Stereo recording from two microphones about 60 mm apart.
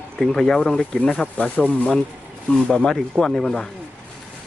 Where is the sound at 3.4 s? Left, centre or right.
Centre.